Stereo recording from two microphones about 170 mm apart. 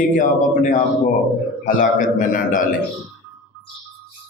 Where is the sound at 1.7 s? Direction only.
50° left (ahead or behind).